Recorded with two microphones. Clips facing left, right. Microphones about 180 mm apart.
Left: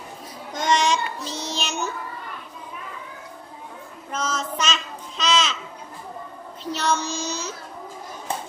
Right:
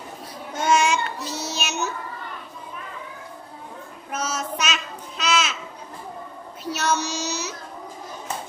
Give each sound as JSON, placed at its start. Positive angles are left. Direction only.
{"t": 0.5, "sound": "child singing", "side_deg": -10}
{"t": 4.1, "sound": "child singing", "side_deg": -10}
{"t": 6.7, "sound": "child singing", "side_deg": -10}
{"t": 7.0, "sound": "child singing", "side_deg": -70}